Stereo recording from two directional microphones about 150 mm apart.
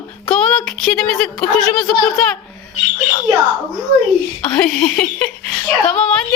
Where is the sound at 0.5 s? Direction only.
5° left (ahead or behind).